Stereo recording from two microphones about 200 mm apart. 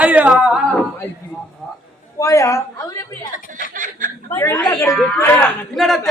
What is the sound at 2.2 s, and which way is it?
Speech, 15° left (ahead or behind).